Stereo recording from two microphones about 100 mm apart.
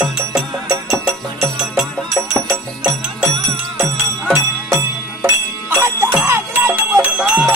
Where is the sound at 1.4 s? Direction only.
Centre (ahead or behind).